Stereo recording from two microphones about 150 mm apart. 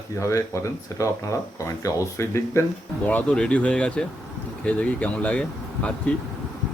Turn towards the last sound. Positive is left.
turn(degrees=10)  # may be behind; listen again after turning